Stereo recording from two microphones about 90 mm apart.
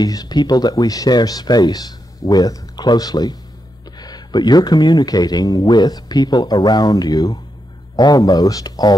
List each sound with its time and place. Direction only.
0.0 s speech: 45° left (ahead or behind)